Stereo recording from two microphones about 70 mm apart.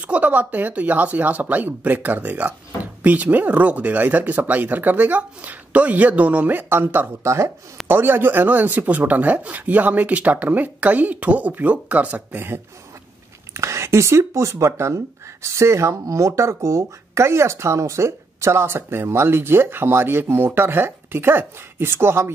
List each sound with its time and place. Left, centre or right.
0.0 s speech: right
7.2 s speech: right
13.5 s speech: right